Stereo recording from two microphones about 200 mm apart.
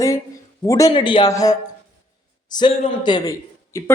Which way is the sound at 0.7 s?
20° left (ahead or behind).